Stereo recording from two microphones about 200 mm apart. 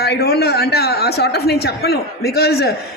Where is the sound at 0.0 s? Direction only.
50° left (ahead or behind).